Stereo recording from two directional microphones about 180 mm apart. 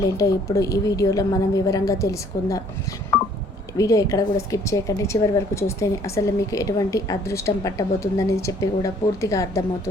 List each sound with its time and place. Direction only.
0.0 s a woman's voice: 20° left (ahead or behind)
3.8 s a woman's voice: 15° left (ahead or behind)